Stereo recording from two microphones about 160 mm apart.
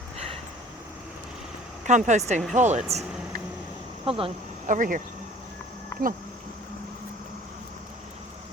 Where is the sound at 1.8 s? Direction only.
50° right (ahead or behind).